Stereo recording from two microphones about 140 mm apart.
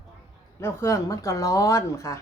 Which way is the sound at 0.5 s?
20° left (ahead or behind).